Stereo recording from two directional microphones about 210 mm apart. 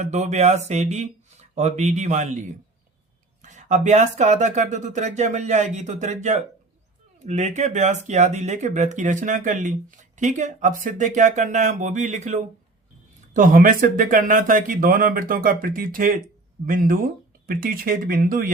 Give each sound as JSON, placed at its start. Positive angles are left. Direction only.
{"t": 0.0, "sound": "speech", "side_deg": -35}
{"t": 3.4, "sound": "speech", "side_deg": -35}